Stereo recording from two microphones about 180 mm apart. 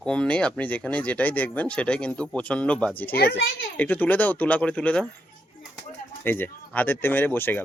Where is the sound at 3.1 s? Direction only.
60° left (ahead or behind).